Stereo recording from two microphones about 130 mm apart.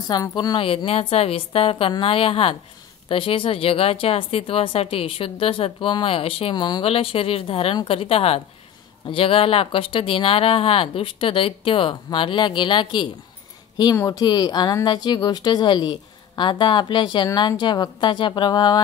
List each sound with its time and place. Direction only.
0.1 s speech: 30° left (ahead or behind)
0.6 s speech: 45° left (ahead or behind)
6.5 s speech: 30° left (ahead or behind)
6.8 s speech: 45° left (ahead or behind)
13.9 s speech: 25° left (ahead or behind)